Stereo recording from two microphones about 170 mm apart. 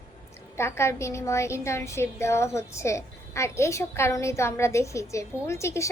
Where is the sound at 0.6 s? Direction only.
15° left (ahead or behind).